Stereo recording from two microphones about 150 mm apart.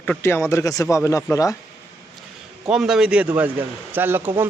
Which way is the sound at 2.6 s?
5° right (ahead or behind).